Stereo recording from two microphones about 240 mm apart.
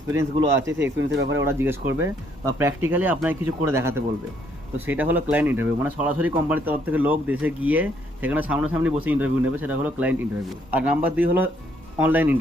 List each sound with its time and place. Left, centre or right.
0.1 s speech: centre
0.9 s speech: right
1.4 s speech: centre